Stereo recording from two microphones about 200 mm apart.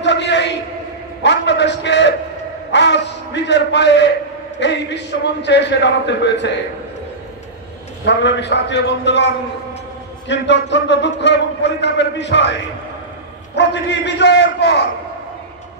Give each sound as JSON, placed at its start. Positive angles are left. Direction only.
{"t": 0.0, "sound": "a sound", "side_deg": 60}
{"t": 4.6, "sound": "a man's voice", "side_deg": 60}
{"t": 8.0, "sound": "a man's voice", "side_deg": 60}
{"t": 13.6, "sound": "a man's voice", "side_deg": 60}